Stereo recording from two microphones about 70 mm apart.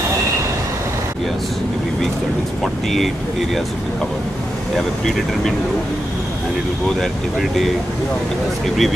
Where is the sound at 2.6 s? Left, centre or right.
Centre.